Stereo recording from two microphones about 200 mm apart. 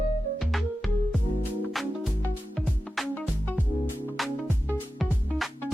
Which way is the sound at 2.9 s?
5° left (ahead or behind).